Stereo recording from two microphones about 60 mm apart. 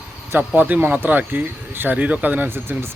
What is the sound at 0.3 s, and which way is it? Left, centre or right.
Speech, right.